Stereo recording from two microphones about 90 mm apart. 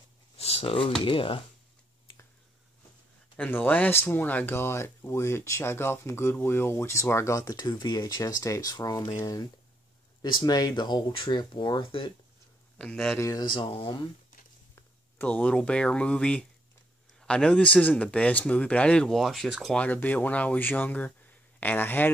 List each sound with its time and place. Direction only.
0.5 s speech: 90° left
3.3 s speech: 20° left (ahead or behind)
7.5 s speech: 50° left (ahead or behind); by 12.1 s 70° left (ahead or behind)
12.7 s speech: 10° left (ahead or behind)
13.2 s speech: 45° left (ahead or behind)
13.7 s speech: 65° left (ahead or behind)
15.2 s speech: 15° left (ahead or behind)
19.8 s speech: 20° left (ahead or behind)